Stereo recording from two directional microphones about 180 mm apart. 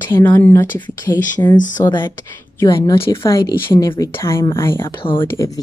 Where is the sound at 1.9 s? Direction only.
25° left (ahead or behind).